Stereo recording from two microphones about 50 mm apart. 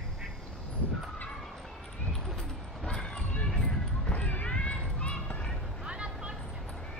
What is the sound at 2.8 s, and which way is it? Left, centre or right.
Run, centre.